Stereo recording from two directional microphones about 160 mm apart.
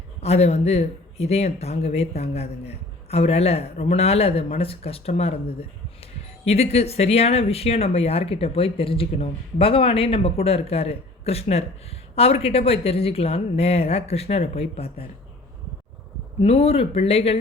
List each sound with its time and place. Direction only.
0.2 s speech: 40° left (ahead or behind)
16.4 s speech: 40° left (ahead or behind)